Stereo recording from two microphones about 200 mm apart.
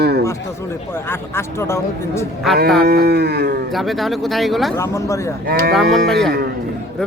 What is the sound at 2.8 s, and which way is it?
Cattle, 50° right (ahead or behind).